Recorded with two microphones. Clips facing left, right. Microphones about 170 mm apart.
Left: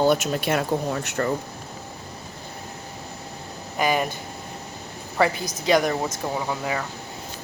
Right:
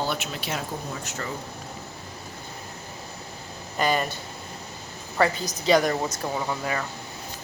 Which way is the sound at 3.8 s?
10° left (ahead or behind).